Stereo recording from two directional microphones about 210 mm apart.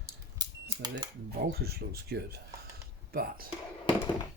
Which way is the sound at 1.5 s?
50° right (ahead or behind).